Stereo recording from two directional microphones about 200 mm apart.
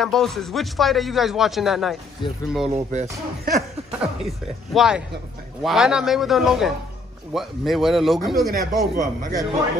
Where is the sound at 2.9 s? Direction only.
35° right (ahead or behind).